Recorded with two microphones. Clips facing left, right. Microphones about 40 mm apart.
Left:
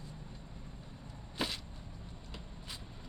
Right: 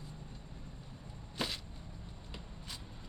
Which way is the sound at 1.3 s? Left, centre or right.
Centre.